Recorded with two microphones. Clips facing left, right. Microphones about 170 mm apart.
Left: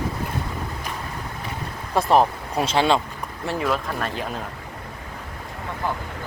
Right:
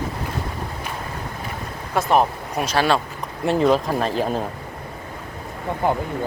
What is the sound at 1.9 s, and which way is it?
Speech, centre (ahead or behind).